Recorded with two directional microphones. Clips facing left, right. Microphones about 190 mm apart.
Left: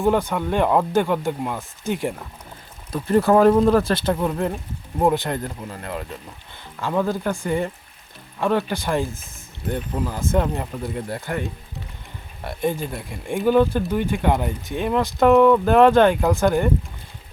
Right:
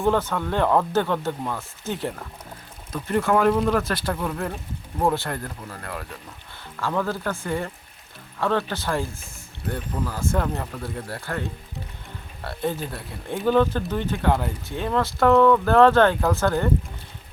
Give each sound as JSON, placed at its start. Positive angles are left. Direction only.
{"t": 0.0, "sound": "speech", "side_deg": 15}
{"t": 2.9, "sound": "speech", "side_deg": 35}